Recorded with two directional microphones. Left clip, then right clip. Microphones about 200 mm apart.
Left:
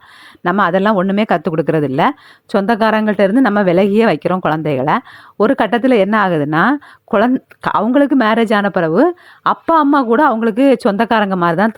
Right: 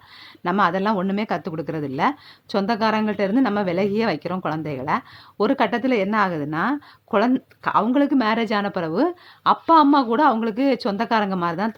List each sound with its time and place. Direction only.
0.4 s speech: 35° left (ahead or behind)